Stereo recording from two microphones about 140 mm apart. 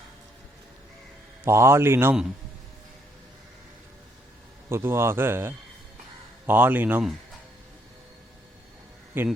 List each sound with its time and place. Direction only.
1.5 s speech: 20° right (ahead or behind)
4.7 s speech: 15° right (ahead or behind)
9.2 s speech: 15° right (ahead or behind)